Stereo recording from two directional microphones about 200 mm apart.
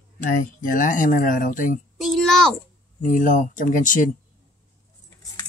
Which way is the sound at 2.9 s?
40° left (ahead or behind).